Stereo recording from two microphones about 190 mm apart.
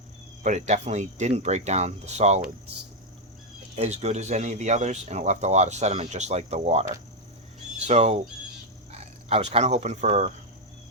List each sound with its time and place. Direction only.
0.4 s speech: 40° right (ahead or behind)
3.8 s speech: 35° right (ahead or behind)
7.9 s speech: 35° right (ahead or behind)